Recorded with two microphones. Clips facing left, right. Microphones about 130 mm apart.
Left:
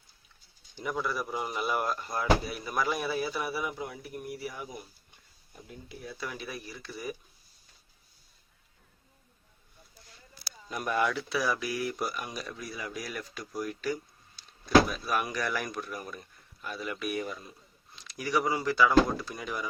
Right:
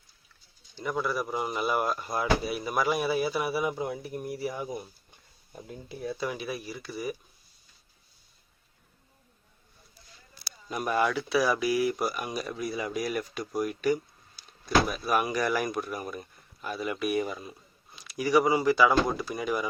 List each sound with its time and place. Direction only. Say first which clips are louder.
0.9 s speech: right 3 dB; centre (ahead or behind)
3.6 s speech: right 6 dB; 25° right (ahead or behind)
6.1 s speech: right 3 dB; 15° right (ahead or behind)
10.7 s speech: right 2 dB; 10° right (ahead or behind)